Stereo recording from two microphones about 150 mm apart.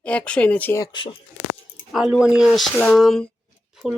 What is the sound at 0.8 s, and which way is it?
Speech, 30° left (ahead or behind).